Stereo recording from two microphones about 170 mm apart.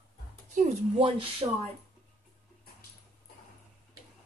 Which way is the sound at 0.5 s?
45° right (ahead or behind).